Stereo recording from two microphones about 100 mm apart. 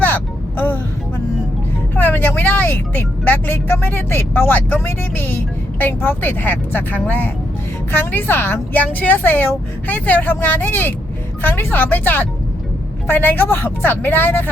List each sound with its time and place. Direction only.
0.0 s vehicle: 20° left (ahead or behind)
2.0 s a woman's voice: 15° left (ahead or behind)